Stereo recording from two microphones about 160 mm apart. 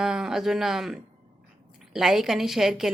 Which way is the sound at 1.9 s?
Centre (ahead or behind).